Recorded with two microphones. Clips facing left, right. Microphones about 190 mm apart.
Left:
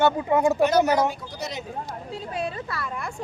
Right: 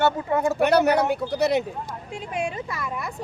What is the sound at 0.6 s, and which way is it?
Speech, 65° right (ahead or behind).